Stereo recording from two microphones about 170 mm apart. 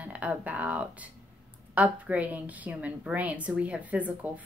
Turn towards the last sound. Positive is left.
turn(degrees=-10)  # may be behind; listen again after turning